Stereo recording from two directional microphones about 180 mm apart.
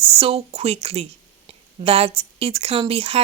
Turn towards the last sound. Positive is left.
turn(degrees=-30)  # may be behind; listen again after turning